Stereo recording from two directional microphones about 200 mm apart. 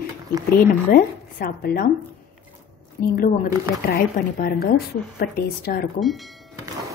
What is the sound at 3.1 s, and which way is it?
A woman's voice, 45° left (ahead or behind).